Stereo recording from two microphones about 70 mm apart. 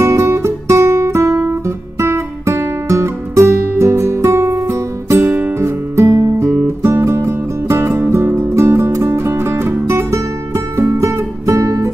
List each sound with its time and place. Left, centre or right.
0.0 s guitar: right
5.6 s music: right